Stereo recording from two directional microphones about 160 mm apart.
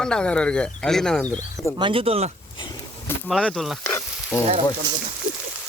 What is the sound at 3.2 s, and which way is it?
Speech, 5° left (ahead or behind).